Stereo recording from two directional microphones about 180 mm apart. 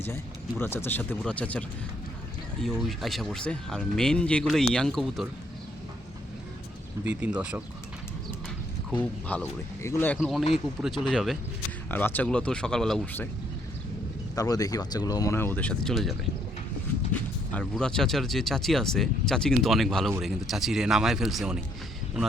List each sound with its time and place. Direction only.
0.0 s speech: 10° left (ahead or behind)
7.0 s speech: 10° right (ahead or behind)
8.9 s speech: 10° left (ahead or behind)
10.2 s speech: centre (ahead or behind)
11.9 s speech: 10° left (ahead or behind)
14.3 s speech: 20° left (ahead or behind); by 21.6 s centre (ahead or behind)